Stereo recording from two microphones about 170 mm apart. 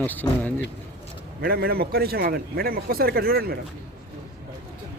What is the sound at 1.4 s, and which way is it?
A man's voice, 65° right (ahead or behind).